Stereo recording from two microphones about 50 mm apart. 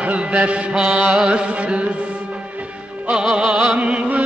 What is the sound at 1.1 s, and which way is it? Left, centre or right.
Music, centre.